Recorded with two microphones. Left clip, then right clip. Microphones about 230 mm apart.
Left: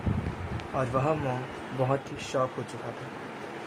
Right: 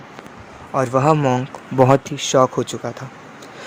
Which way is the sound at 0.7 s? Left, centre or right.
Right.